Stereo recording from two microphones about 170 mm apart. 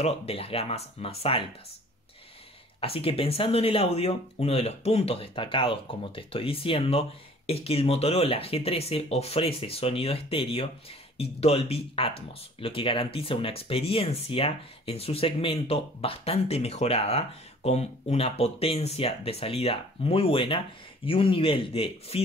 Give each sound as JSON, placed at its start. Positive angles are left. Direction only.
{"t": 0.0, "sound": "speech", "side_deg": 35}
{"t": 2.8, "sound": "speech", "side_deg": 35}